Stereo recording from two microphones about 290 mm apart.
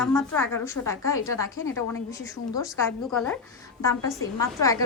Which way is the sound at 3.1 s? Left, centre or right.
Centre.